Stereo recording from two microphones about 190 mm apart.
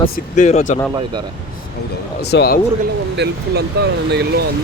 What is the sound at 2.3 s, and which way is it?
Speech, 55° left (ahead or behind).